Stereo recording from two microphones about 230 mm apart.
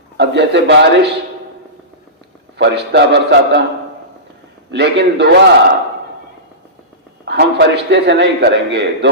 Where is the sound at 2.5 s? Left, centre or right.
Right.